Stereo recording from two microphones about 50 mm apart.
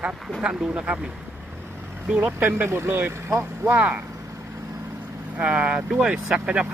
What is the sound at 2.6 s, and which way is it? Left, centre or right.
Speech, right.